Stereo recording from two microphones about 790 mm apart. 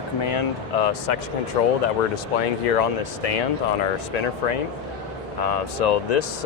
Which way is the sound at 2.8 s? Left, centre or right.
Left.